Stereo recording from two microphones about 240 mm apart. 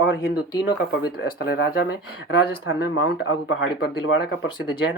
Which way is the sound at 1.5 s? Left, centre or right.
Left.